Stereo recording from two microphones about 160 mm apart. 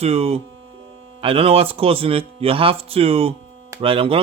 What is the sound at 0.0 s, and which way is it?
Speech, 40° right (ahead or behind).